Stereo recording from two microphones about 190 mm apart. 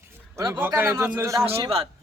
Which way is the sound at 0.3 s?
20° right (ahead or behind).